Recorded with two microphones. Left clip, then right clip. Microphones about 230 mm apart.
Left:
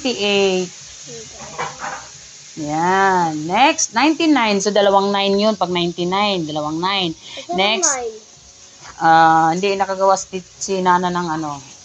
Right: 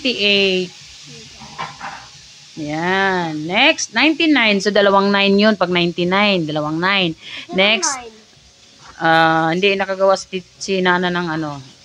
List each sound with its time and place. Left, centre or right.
0.0 s speech: right
2.6 s speech: right